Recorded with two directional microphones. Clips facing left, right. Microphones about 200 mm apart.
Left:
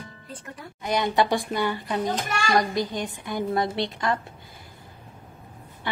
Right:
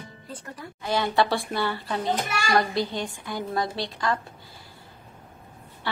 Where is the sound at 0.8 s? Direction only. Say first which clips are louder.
Left 1 dB; 20° left (ahead or behind).